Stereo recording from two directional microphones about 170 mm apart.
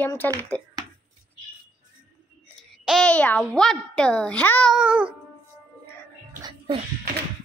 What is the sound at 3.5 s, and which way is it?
A woman's voice, 5° left (ahead or behind).